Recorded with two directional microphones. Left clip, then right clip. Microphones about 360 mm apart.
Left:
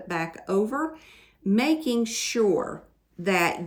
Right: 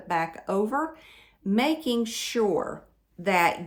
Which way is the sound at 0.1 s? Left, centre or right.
Centre.